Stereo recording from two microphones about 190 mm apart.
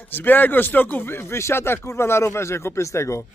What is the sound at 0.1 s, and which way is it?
Speech, 10° left (ahead or behind).